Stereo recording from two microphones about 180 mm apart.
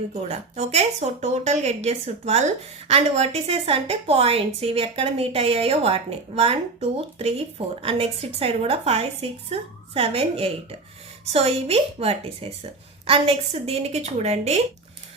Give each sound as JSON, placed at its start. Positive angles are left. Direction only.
{"t": 0.1, "sound": "a woman's voice", "side_deg": -35}